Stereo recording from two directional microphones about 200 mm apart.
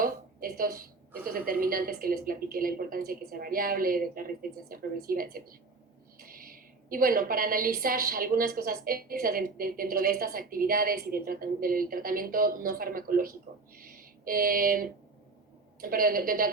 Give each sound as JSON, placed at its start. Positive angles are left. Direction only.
{"t": 0.0, "sound": "a woman's voice", "side_deg": -45}
{"t": 13.7, "sound": "a sound", "side_deg": -45}
{"t": 15.8, "sound": "a woman's voice", "side_deg": -45}